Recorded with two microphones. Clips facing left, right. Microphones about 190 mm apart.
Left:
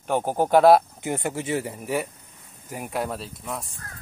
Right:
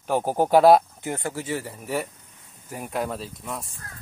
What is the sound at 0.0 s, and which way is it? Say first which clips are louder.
Speech: right 1 dB; 5° right (ahead or behind).